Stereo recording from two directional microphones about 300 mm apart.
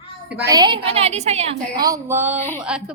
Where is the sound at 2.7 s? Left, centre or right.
Centre.